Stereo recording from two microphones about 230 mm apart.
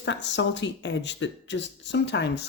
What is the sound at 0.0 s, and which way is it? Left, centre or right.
Speech, left.